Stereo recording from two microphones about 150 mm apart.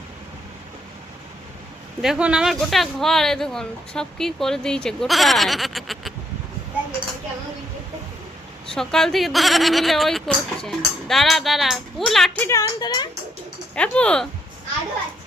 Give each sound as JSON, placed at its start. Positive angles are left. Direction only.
{"t": 2.0, "sound": "speech", "side_deg": -5}
{"t": 8.6, "sound": "speech", "side_deg": 5}
{"t": 12.5, "sound": "speech", "side_deg": 20}
{"t": 13.7, "sound": "speech", "side_deg": 5}